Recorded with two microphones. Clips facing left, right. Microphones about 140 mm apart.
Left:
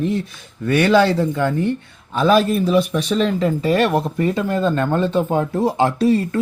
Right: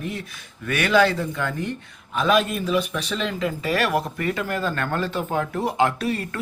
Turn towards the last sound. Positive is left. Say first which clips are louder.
# left 8 dB
turn(degrees=25)  # may be behind; listen again after turning